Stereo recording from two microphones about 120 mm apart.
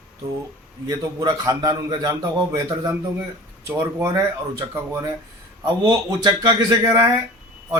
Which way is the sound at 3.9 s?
25° right (ahead or behind).